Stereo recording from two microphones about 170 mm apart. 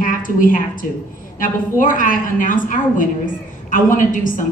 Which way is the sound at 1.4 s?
50° left (ahead or behind).